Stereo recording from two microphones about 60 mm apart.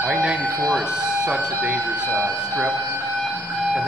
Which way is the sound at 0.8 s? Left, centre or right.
Centre.